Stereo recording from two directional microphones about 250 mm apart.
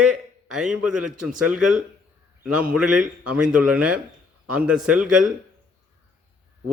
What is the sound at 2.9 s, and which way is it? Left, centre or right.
Speech, right.